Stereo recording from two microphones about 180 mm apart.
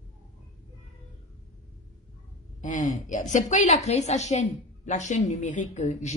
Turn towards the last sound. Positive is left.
turn(degrees=40)  # may be behind; listen again after turning